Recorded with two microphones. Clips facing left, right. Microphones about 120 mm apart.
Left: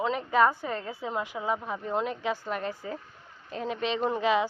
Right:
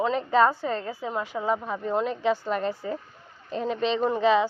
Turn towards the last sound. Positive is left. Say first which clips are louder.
# right 4 dB
turn(degrees=10)  # may be behind; listen again after turning